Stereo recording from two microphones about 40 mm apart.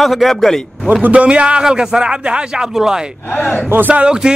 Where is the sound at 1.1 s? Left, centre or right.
Right.